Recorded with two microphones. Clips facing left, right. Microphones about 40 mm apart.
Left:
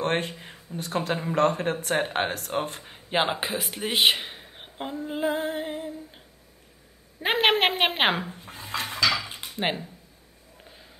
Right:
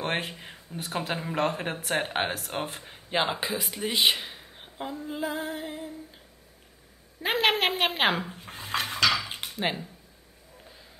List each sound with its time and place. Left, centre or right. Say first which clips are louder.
0.0 s speech: left 4 dB; centre
3.1 s speech: left 2 dB; centre
3.8 s a woman's voice: left 3 dB; left
4.2 s a sound: left 2 dB; left
5.3 s music: left 5 dB; left
7.2 s a woman's voice: left 3 dB; left
7.7 s music: left 2 dB; left
8.3 s dishes: right 1 dB; right
8.8 s dishes: even; left
9.6 s music: left 2 dB; left